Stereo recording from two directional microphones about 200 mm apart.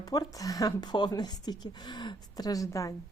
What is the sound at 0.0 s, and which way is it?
Speech, 20° left (ahead or behind).